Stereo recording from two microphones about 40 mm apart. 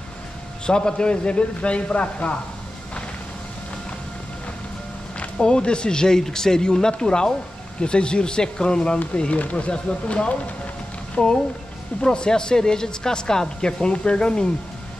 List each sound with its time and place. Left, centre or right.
0.7 s speech: left
5.4 s speech: left